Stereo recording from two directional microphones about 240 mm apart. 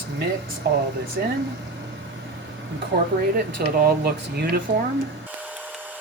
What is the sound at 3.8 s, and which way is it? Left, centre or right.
Speech, right.